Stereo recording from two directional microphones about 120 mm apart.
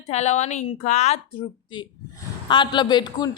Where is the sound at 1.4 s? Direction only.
40° left (ahead or behind).